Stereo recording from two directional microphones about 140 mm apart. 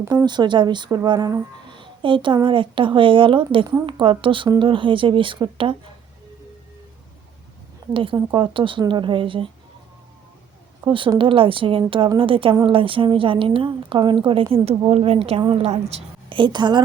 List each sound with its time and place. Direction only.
0.1 s a woman's voice: 30° right (ahead or behind)
7.9 s a woman's voice: 35° right (ahead or behind)
10.8 s a woman's voice: 35° right (ahead or behind)